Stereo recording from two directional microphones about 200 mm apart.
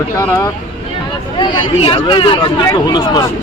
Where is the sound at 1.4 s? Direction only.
25° left (ahead or behind).